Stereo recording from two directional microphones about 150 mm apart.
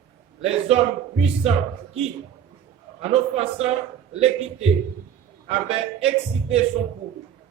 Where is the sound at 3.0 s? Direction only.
45° right (ahead or behind).